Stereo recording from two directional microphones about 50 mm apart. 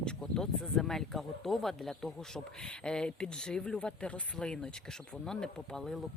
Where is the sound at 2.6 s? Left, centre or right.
Centre.